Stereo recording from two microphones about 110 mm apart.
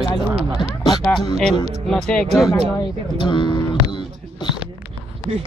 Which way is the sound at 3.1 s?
45° left (ahead or behind).